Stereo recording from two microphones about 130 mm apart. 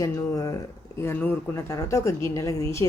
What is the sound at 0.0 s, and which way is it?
Speech, 25° left (ahead or behind).